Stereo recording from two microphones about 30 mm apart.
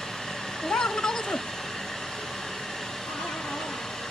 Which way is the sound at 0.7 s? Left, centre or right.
Left.